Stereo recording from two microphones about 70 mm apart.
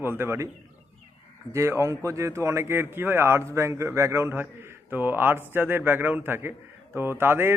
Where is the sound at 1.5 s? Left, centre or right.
Right.